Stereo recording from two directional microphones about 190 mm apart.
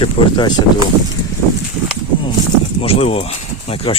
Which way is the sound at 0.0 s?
25° left (ahead or behind).